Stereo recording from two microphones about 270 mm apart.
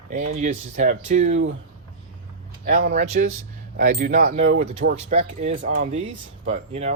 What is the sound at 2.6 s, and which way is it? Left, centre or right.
Speech, right.